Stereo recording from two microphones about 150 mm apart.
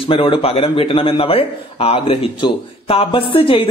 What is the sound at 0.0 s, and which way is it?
Speech, 40° left (ahead or behind).